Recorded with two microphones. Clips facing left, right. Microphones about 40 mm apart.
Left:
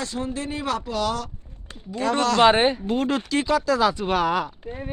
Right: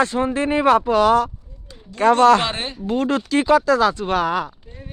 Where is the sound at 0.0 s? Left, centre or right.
Right.